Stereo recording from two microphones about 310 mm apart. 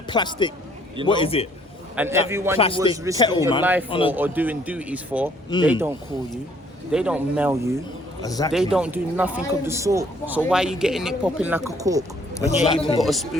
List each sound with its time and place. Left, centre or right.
0.1 s a man's voice: centre
2.0 s a man's voice: centre
3.2 s a man's voice: centre
3.6 s speech: centre
3.8 s a man's voice: centre
4.1 s speech: centre
5.5 s a man's voice: centre
6.9 s speech: centre
8.2 s a man's voice: centre
8.5 s speech: centre
12.5 s a man's voice: centre
13.0 s speech: centre